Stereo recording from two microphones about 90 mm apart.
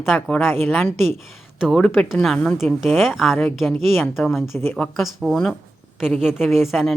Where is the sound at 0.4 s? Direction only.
25° left (ahead or behind).